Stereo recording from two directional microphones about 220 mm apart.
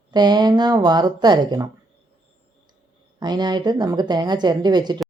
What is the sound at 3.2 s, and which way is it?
Speech, 20° right (ahead or behind).